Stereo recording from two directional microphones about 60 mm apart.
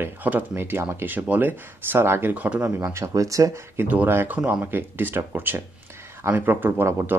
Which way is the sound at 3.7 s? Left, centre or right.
Right.